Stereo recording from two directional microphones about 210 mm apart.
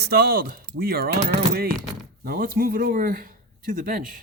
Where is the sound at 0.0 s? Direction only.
45° right (ahead or behind).